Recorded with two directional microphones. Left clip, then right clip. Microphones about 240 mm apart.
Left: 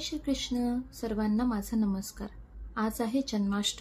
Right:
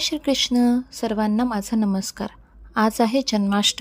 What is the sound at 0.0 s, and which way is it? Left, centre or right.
Speech, right.